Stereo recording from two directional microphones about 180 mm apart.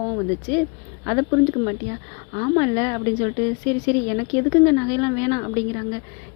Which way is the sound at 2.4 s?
25° left (ahead or behind).